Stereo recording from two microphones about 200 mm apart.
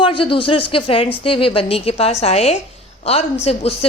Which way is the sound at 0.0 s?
25° left (ahead or behind).